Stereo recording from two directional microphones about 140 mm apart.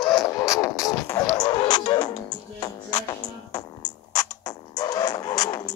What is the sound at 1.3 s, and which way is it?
Music, 30° left (ahead or behind).